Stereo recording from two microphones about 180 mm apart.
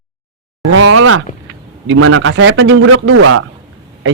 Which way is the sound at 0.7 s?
90° right.